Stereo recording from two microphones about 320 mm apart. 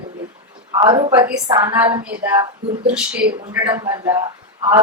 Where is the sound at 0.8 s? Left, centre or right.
Centre.